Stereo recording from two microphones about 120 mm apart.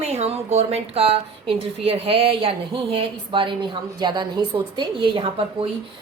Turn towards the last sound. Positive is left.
turn(degrees=-50)  # may be behind; listen again after turning